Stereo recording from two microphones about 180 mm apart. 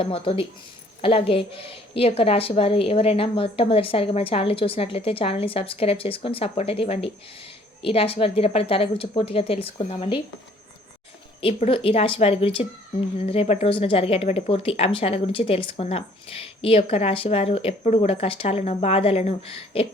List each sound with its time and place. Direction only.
0.0 s a woman's voice: 30° left (ahead or behind)
11.3 s a woman's voice: 30° left (ahead or behind)